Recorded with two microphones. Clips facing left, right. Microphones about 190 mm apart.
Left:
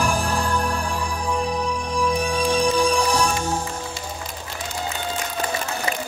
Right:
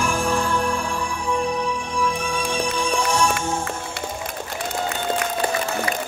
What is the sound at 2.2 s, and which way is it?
Music, 40° left (ahead or behind).